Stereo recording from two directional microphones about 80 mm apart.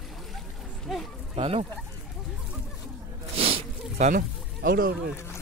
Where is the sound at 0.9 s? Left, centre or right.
Centre.